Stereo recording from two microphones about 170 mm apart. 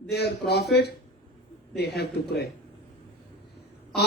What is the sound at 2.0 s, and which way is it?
Speech, 70° left (ahead or behind).